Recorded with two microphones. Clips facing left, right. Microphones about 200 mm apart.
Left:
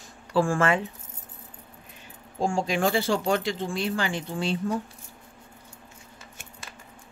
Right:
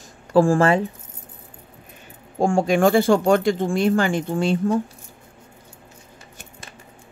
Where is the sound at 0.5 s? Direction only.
35° right (ahead or behind).